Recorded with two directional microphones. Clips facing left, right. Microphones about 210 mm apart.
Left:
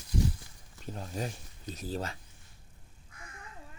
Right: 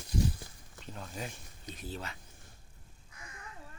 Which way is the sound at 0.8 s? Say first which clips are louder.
Left 5 dB; 40° left (ahead or behind).